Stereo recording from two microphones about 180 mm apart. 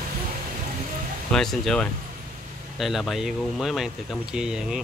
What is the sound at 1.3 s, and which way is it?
Speech, centre (ahead or behind).